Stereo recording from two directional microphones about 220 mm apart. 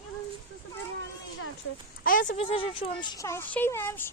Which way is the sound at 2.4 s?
25° left (ahead or behind).